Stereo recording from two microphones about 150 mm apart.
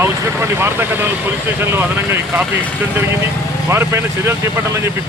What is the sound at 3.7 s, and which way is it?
Speech, 15° right (ahead or behind).